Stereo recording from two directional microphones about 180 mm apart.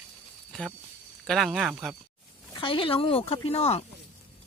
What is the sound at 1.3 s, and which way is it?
Speech, centre (ahead or behind).